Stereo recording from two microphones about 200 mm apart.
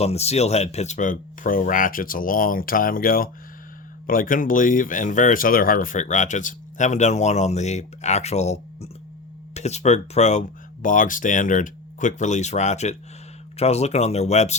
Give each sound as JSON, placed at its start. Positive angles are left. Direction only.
{"t": 0.0, "sound": "speech", "side_deg": 30}